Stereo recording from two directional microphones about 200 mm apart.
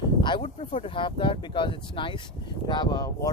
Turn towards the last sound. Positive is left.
turn(degrees=20)  # may be behind; listen again after turning